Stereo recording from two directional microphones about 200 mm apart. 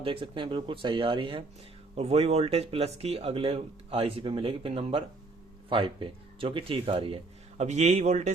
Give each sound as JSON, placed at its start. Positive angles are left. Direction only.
{"t": 0.0, "sound": "a man's voice", "side_deg": -25}